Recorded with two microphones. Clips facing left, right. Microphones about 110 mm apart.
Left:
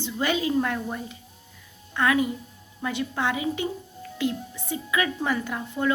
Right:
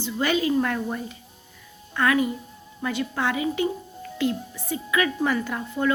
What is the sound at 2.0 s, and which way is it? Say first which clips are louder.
A woman's voice: right 1 dB; 15° left (ahead or behind).